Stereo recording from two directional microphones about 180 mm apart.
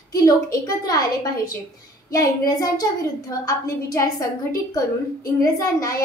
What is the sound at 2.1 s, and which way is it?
A woman's voice, 20° left (ahead or behind).